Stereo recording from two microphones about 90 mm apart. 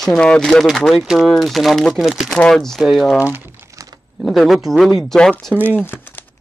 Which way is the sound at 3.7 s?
40° right (ahead or behind).